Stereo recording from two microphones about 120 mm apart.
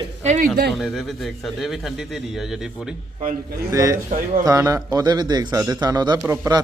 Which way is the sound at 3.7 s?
25° right (ahead or behind).